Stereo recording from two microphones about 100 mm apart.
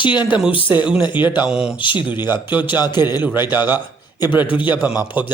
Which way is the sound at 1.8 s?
55° left (ahead or behind).